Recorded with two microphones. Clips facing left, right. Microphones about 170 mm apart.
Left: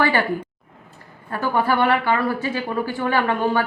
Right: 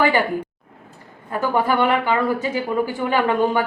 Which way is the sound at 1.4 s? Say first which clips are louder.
Right 1 dB; 20° right (ahead or behind).